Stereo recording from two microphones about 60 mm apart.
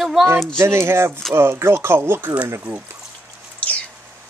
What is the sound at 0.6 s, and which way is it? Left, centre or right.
Speech, right.